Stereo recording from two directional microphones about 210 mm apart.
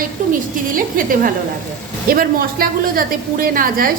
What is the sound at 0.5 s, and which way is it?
A woman's voice, 40° right (ahead or behind).